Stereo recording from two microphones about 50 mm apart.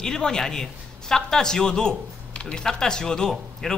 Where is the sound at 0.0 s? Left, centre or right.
Centre.